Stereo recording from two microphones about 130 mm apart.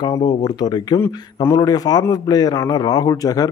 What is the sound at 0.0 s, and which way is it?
A man's voice, 30° left (ahead or behind).